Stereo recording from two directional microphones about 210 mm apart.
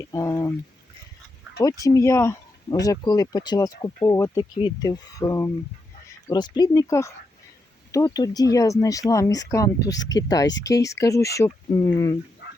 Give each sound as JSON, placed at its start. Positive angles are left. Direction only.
{"t": 0.0, "sound": "speech", "side_deg": 15}
{"t": 1.8, "sound": "speech", "side_deg": 15}
{"t": 12.4, "sound": "dog", "side_deg": 50}